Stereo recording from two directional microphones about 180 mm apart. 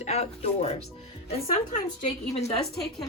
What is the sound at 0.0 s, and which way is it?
Speech, 35° left (ahead or behind).